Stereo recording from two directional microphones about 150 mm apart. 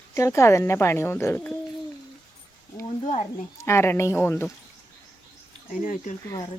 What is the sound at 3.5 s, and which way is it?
Speech, 15° left (ahead or behind).